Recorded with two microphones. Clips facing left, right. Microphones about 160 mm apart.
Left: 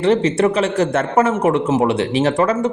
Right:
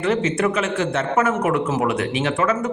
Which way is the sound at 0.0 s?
35° left (ahead or behind).